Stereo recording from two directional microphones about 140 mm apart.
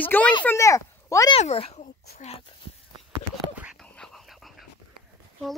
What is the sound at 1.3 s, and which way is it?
Speech, 45° left (ahead or behind).